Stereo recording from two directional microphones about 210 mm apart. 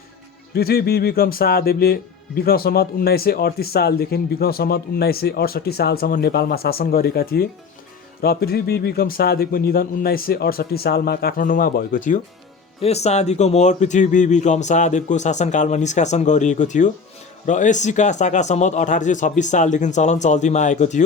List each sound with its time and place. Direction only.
0.5 s speech: 50° left (ahead or behind)